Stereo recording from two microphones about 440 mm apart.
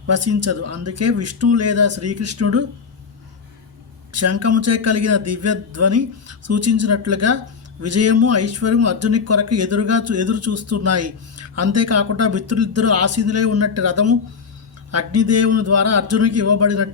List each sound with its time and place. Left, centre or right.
0.1 s speech: right
4.1 s speech: right